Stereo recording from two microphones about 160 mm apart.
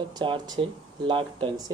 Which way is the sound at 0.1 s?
30° right (ahead or behind).